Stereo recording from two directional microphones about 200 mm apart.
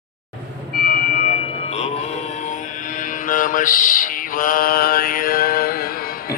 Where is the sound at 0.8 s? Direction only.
45° left (ahead or behind).